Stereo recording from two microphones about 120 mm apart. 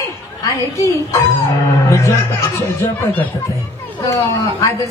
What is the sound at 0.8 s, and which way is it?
Speech, 25° left (ahead or behind).